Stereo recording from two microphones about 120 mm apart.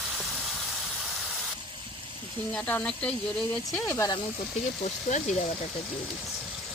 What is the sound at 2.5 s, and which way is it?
Speech, 10° left (ahead or behind).